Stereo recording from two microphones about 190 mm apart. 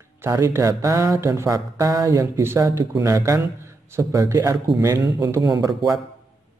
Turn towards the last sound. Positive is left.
turn(degrees=-20)  # may be behind; listen again after turning